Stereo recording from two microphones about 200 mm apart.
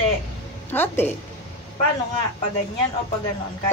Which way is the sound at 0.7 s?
10° left (ahead or behind).